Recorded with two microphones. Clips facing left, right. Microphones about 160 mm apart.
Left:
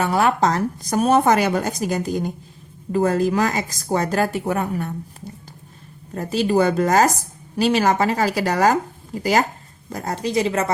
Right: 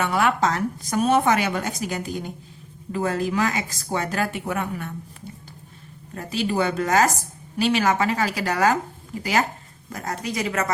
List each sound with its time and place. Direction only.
0.0 s a woman's voice: 35° left (ahead or behind)
6.1 s a woman's voice: 40° left (ahead or behind)
9.9 s a woman's voice: 30° left (ahead or behind)